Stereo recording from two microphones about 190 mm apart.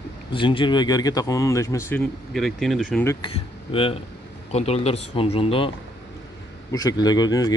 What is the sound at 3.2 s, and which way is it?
Speech, 30° left (ahead or behind).